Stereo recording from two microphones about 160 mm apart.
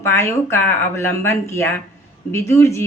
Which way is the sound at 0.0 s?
15° left (ahead or behind).